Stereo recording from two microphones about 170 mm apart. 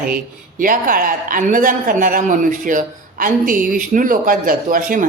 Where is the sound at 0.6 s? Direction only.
55° right (ahead or behind).